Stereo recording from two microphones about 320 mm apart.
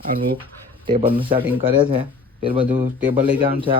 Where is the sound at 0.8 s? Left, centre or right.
Centre.